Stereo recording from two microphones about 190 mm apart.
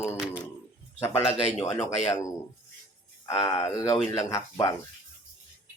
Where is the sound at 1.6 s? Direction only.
15° left (ahead or behind).